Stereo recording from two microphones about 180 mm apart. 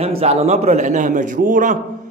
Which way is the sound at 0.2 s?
35° right (ahead or behind).